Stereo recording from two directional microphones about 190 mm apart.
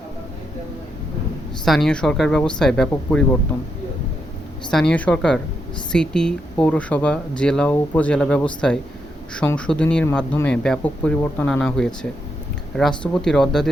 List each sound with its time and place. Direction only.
1.6 s speech: centre (ahead or behind)
4.7 s speech: 5° left (ahead or behind)
13.0 s speech: 5° left (ahead or behind)